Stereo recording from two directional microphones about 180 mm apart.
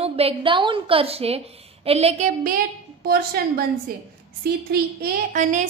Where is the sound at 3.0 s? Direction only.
60° right (ahead or behind).